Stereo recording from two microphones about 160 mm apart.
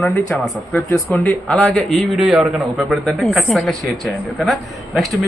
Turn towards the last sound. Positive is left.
turn(degrees=0)  # may be behind; listen again after turning